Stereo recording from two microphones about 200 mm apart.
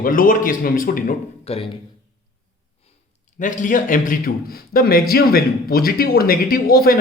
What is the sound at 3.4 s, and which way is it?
A man's voice, 40° left (ahead or behind).